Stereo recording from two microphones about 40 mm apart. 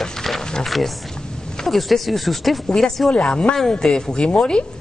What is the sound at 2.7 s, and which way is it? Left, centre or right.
A woman's voice, centre.